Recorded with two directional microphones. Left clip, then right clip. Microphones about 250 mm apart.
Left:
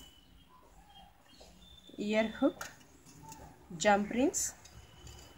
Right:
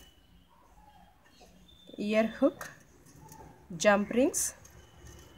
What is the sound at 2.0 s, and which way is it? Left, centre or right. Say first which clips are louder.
Speech: right 4 dB; right.